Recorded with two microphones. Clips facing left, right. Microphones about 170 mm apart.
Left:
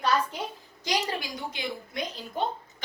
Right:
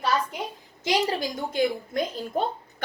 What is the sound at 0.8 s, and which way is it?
Speech, 25° right (ahead or behind).